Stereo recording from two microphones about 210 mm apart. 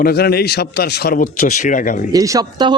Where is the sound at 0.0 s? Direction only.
50° left (ahead or behind).